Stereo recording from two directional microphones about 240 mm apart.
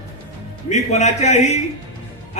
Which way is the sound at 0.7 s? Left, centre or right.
Left.